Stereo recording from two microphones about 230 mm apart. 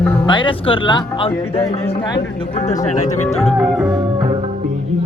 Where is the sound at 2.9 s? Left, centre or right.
Left.